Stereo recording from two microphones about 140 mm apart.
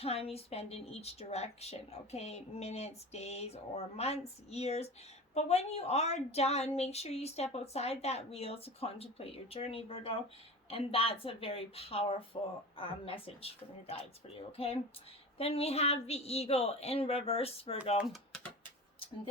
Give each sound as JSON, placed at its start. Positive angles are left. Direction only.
{"t": 0.0, "sound": "a woman's voice", "side_deg": 45}